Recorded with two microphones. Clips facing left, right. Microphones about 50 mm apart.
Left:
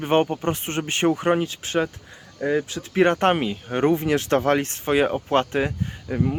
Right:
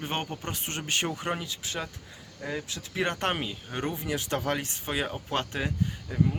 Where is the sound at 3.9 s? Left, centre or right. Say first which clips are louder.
Left 11 dB; left.